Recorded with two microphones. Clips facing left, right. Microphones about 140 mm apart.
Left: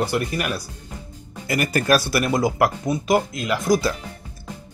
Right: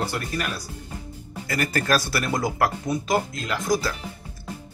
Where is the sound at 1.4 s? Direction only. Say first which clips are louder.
Left 4 dB; 15° left (ahead or behind).